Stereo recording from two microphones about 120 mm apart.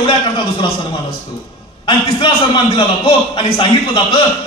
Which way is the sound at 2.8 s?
45° left (ahead or behind).